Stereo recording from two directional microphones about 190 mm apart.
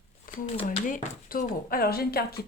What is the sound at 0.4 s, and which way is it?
Speech, 35° left (ahead or behind).